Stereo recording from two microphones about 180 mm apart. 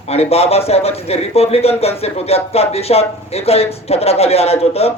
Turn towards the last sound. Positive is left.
turn(degrees=35)  # may be behind; listen again after turning